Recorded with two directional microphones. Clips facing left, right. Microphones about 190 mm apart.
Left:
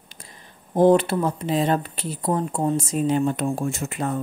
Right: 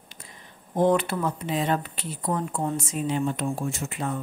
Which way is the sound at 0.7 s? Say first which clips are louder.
Left 5 dB; 35° left (ahead or behind).